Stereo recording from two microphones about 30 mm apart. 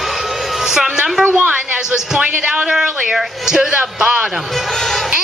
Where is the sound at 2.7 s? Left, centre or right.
Centre.